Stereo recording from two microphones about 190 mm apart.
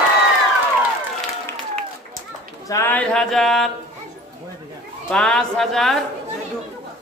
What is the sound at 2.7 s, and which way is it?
A man's voice, 15° left (ahead or behind).